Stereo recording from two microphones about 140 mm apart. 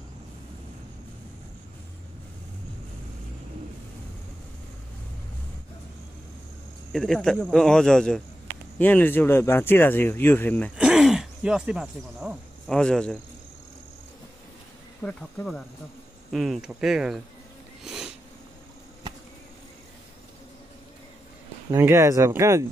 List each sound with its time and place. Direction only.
6.9 s speech: 5° left (ahead or behind)
10.8 s speech: 5° right (ahead or behind)
12.6 s speech: 5° left (ahead or behind)
15.0 s speech: 5° left (ahead or behind)
16.3 s speech: centre (ahead or behind)
17.8 s a sound: 5° right (ahead or behind)
21.7 s speech: 20° right (ahead or behind)